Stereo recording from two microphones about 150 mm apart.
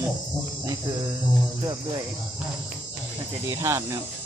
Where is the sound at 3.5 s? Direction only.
20° right (ahead or behind).